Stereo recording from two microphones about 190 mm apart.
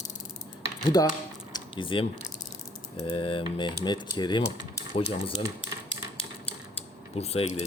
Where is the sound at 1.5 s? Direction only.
25° left (ahead or behind).